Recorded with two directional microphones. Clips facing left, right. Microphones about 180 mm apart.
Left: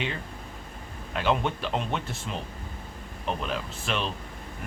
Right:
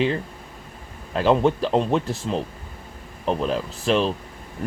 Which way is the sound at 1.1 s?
35° right (ahead or behind).